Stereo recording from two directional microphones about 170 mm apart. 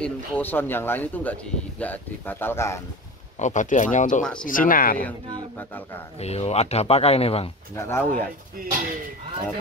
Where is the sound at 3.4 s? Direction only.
45° left (ahead or behind).